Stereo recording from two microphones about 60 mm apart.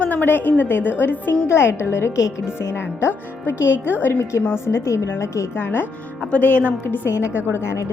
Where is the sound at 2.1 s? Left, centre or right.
Left.